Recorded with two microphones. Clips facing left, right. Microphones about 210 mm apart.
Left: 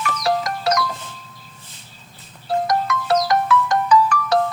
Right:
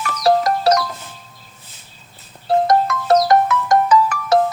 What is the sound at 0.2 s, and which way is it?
Music, 35° right (ahead or behind).